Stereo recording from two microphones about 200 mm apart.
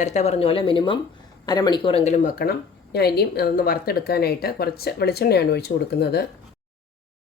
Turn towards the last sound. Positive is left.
turn(degrees=55)  # may be behind; listen again after turning